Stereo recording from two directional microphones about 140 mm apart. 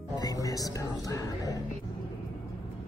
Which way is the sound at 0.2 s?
25° left (ahead or behind).